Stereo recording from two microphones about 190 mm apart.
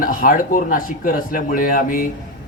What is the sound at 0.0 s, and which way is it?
A man's voice, 45° left (ahead or behind).